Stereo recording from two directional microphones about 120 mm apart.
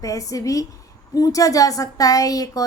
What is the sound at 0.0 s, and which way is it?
A woman's voice, 30° left (ahead or behind).